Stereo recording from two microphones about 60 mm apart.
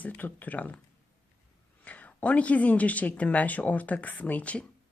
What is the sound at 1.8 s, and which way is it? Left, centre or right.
Speech, left.